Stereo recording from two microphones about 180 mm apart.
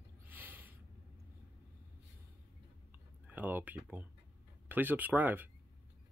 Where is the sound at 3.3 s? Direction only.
10° right (ahead or behind).